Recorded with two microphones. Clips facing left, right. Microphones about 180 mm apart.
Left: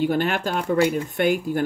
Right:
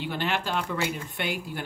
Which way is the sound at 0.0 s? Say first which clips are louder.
Left 8 dB; 45° left (ahead or behind).